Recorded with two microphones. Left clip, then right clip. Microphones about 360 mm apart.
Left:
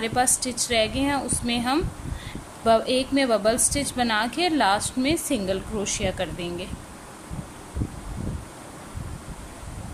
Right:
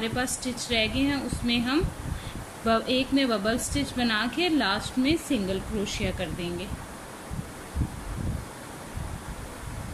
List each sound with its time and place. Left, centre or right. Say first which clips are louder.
0.0 s speech: left 6 dB; centre